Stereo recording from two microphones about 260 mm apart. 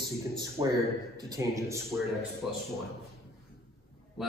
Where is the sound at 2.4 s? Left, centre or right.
Centre.